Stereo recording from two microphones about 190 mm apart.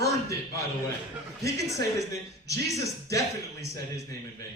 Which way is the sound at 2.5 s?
15° left (ahead or behind).